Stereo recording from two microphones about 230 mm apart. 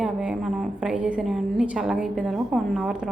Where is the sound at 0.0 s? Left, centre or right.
Centre.